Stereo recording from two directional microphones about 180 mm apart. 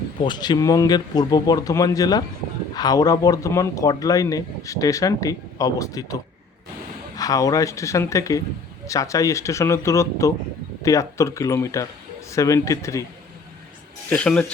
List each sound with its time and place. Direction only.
0.2 s speech: 25° left (ahead or behind)
7.2 s speech: 20° left (ahead or behind)
14.1 s speech: 5° left (ahead or behind)